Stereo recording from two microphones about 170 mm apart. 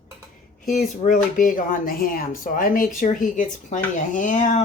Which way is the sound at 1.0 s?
50° left (ahead or behind).